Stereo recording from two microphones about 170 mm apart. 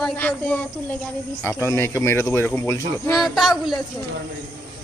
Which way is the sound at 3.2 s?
Centre (ahead or behind).